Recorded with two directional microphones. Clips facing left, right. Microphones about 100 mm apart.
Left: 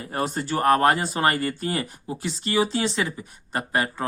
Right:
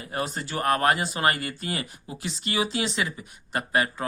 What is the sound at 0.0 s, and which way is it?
Speech, 40° left (ahead or behind).